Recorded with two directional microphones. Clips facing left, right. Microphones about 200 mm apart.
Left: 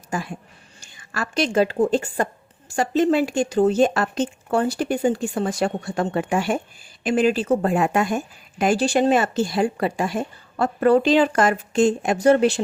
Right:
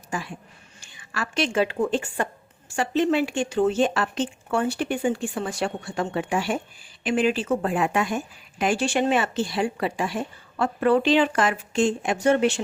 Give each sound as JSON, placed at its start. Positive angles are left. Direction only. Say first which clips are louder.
{"t": 0.1, "sound": "a woman's voice", "louder": "left 4 dB", "side_deg": 45}